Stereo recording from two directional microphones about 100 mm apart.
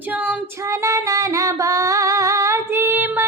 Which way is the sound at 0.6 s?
30° right (ahead or behind).